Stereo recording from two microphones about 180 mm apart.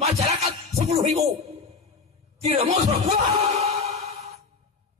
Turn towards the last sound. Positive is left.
turn(degrees=-35)  # may be behind; listen again after turning